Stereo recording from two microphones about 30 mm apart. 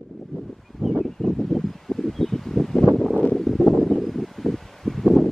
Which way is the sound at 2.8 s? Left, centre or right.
Centre.